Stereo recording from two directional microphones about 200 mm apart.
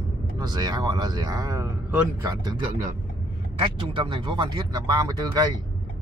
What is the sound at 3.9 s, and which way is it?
Speech, 25° right (ahead or behind).